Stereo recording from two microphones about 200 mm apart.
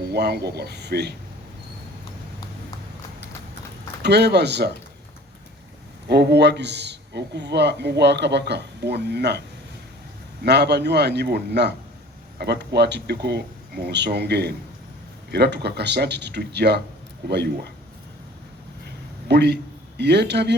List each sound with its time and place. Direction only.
0.1 s a man's voice: 55° right (ahead or behind)
4.0 s a man's voice: 55° right (ahead or behind)
6.1 s a man's voice: 55° right (ahead or behind)
10.4 s a man's voice: 55° right (ahead or behind)
19.3 s a man's voice: 55° right (ahead or behind)